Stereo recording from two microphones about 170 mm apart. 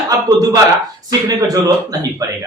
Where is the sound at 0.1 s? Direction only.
20° right (ahead or behind).